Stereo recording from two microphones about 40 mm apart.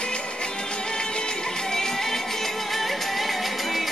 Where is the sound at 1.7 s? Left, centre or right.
Centre.